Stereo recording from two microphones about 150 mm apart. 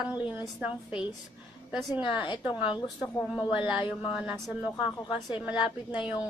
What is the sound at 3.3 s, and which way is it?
Speech, 30° left (ahead or behind).